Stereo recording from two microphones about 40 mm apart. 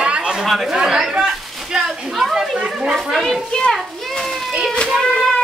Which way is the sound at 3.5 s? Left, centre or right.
Centre.